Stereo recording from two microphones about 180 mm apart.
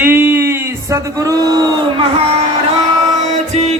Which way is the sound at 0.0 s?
10° right (ahead or behind).